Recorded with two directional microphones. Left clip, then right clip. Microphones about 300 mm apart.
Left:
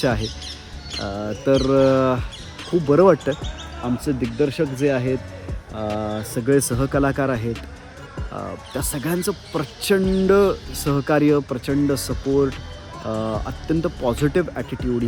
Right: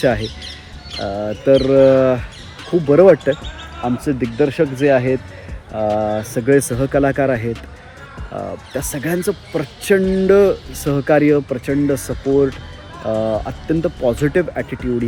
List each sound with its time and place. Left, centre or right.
0.2 s music: left
1.0 s speech: centre